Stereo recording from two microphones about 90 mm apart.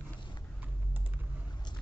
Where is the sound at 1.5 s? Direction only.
50° left (ahead or behind).